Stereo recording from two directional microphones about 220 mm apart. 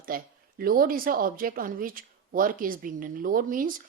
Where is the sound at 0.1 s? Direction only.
40° right (ahead or behind).